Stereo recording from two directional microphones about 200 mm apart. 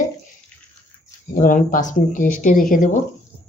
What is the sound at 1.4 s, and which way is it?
A woman's voice, 40° left (ahead or behind).